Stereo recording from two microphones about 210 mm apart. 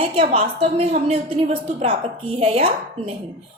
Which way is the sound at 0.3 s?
30° right (ahead or behind).